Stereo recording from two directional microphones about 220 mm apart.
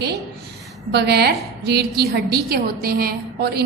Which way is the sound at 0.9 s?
50° right (ahead or behind).